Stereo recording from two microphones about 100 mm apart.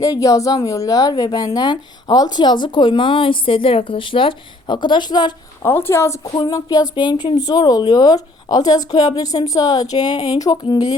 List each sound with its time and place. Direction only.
0.0 s speech: 35° left (ahead or behind)
5.6 s a woman's voice: 20° left (ahead or behind)
6.5 s speech: 40° left (ahead or behind)